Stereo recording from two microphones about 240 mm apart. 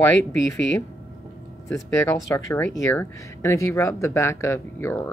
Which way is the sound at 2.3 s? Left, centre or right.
Centre.